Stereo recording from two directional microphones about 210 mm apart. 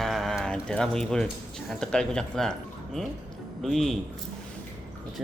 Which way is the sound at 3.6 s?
Centre (ahead or behind).